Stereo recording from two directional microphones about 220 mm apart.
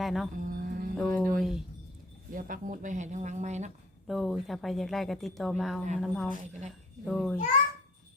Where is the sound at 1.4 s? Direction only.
Centre (ahead or behind).